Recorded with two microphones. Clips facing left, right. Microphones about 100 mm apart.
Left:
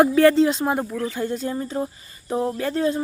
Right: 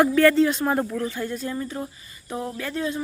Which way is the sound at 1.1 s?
25° left (ahead or behind).